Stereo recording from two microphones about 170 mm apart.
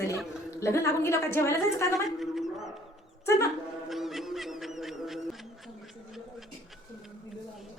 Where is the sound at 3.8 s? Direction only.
Centre (ahead or behind).